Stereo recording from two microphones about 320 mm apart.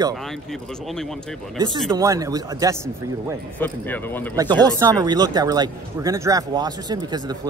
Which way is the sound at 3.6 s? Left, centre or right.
Centre.